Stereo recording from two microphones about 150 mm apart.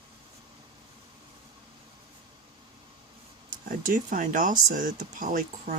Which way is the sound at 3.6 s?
65° right (ahead or behind).